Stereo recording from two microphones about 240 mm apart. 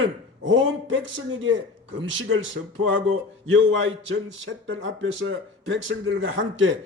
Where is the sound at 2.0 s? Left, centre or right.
Right.